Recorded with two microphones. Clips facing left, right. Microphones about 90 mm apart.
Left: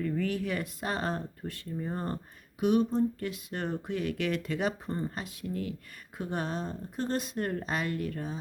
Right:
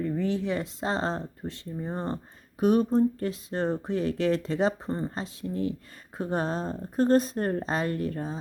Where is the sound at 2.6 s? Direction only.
40° right (ahead or behind).